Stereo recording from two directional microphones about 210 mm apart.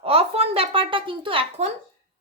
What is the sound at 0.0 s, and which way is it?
A child's voice, 25° right (ahead or behind).